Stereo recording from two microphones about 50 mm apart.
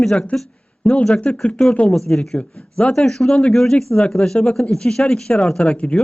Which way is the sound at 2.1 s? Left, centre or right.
Centre.